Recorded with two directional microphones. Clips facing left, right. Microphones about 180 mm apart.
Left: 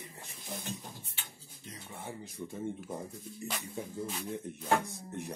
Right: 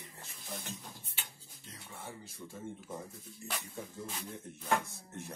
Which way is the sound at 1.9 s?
20° left (ahead or behind).